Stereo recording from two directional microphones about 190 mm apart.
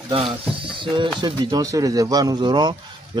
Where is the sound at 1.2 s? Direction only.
20° right (ahead or behind).